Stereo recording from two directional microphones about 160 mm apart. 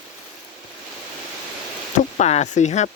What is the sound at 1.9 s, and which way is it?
Speech, 45° left (ahead or behind).